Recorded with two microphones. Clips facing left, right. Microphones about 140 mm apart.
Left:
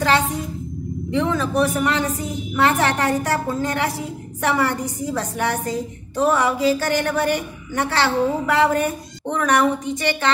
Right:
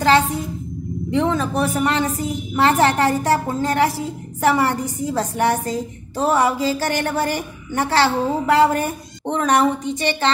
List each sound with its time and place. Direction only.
1.1 s a woman's voice: 35° right (ahead or behind)